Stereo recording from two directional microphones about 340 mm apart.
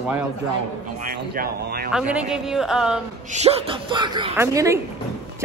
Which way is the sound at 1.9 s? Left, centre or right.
Centre.